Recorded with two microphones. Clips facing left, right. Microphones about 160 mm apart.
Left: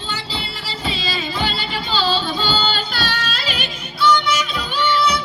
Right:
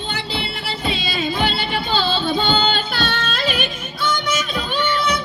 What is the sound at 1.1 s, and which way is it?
Music, 55° right (ahead or behind).